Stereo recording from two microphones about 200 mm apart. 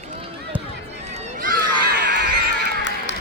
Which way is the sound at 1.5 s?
55° right (ahead or behind).